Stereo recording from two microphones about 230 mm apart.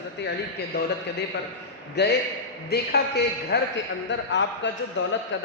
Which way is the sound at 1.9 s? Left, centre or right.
Left.